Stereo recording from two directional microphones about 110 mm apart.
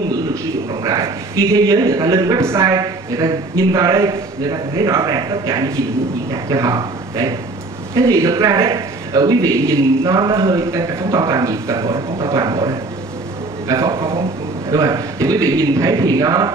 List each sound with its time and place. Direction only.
0.8 s a man's voice: 30° right (ahead or behind)